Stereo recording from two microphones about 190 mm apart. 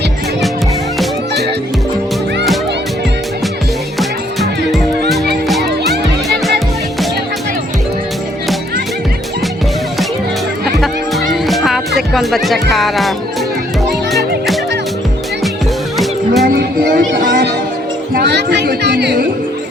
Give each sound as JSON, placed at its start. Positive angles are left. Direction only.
{"t": 4.4, "sound": "music", "side_deg": 0}
{"t": 11.3, "sound": "music", "side_deg": 0}
{"t": 12.7, "sound": "speech", "side_deg": 0}
{"t": 16.4, "sound": "music", "side_deg": -55}
{"t": 18.1, "sound": "chatter", "side_deg": -60}